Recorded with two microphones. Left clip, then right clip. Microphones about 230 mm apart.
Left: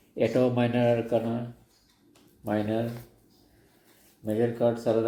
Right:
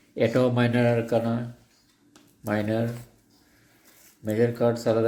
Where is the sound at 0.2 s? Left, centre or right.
Right.